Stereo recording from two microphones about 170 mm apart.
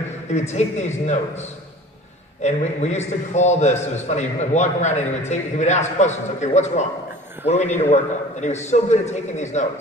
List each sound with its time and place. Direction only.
0.3 s a man's voice: 40° left (ahead or behind)